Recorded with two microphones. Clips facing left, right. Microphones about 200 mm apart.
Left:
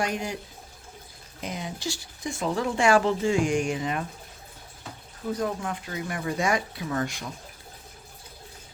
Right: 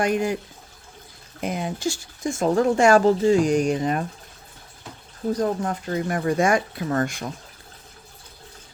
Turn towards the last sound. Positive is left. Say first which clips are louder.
# right 5 dB
turn(degrees=-50)  # may be behind; listen again after turning